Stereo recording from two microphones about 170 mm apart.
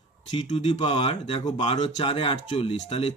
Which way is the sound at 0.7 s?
35° left (ahead or behind).